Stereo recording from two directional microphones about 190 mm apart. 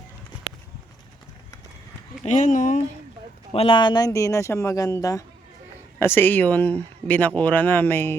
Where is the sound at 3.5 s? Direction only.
25° left (ahead or behind).